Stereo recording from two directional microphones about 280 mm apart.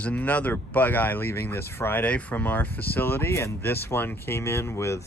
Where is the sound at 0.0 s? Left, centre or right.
Centre.